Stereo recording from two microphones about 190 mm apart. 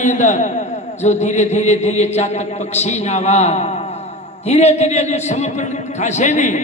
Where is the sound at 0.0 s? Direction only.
40° left (ahead or behind).